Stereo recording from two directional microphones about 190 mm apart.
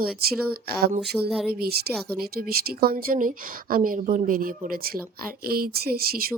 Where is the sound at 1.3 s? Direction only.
Centre (ahead or behind).